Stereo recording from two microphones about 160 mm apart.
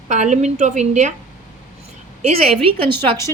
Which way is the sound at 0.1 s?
45° right (ahead or behind).